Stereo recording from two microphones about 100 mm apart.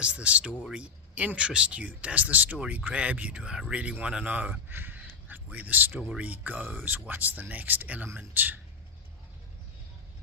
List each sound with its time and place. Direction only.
0.0 s speech: 10° right (ahead or behind)